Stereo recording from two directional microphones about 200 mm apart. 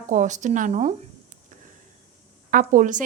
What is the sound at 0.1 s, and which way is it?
Speech, 40° right (ahead or behind).